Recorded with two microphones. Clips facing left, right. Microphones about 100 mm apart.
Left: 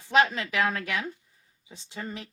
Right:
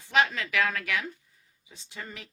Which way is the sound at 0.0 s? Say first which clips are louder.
Left 3 dB; 25° left (ahead or behind).